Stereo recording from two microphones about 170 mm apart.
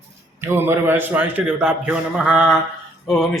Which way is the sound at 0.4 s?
15° right (ahead or behind).